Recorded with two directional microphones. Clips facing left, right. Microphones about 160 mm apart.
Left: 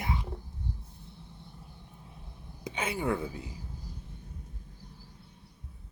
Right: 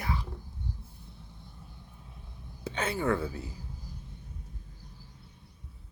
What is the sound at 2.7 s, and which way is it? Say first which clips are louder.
Speech: right 2 dB; 10° left (ahead or behind).